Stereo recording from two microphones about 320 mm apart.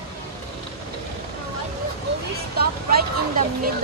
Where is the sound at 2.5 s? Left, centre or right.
Right.